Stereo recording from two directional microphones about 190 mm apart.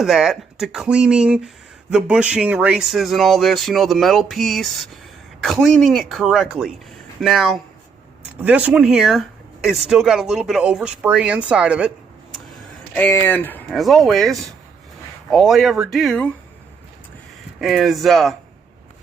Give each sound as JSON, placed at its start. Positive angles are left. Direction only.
{"t": 0.0, "sound": "speech", "side_deg": 0}
{"t": 12.9, "sound": "speech", "side_deg": 10}
{"t": 17.6, "sound": "speech", "side_deg": 0}